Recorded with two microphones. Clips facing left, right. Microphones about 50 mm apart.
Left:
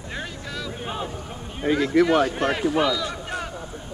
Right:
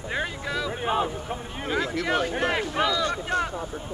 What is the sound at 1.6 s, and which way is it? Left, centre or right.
Speech, centre.